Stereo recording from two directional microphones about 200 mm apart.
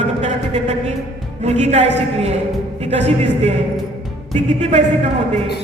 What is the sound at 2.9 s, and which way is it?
Speech, 30° right (ahead or behind).